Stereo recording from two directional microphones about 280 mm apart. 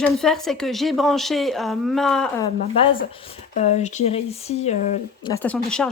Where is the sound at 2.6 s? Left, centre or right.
Centre.